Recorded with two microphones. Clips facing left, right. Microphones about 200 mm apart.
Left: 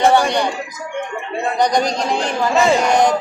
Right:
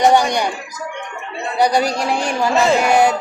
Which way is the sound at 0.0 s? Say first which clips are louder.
Even; 15° right (ahead or behind).